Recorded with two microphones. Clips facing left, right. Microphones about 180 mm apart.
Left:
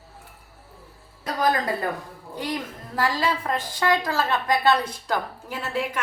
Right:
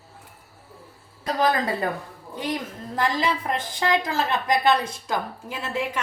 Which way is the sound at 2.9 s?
20° right (ahead or behind).